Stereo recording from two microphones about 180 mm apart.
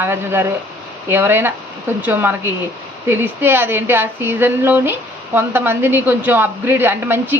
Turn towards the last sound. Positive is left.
turn(degrees=-10)  # may be behind; listen again after turning